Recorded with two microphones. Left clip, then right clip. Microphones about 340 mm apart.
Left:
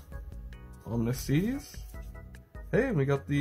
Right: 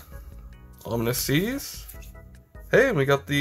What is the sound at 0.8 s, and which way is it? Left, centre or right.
Speech, centre.